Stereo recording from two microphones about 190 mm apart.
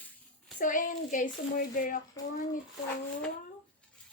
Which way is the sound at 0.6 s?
45° left (ahead or behind).